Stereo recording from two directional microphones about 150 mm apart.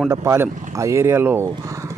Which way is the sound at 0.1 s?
20° right (ahead or behind).